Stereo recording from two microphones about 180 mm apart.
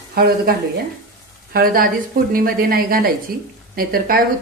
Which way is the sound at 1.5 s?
55° right (ahead or behind).